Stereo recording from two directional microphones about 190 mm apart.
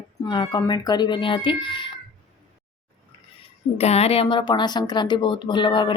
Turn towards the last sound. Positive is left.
turn(degrees=25)  # may be behind; listen again after turning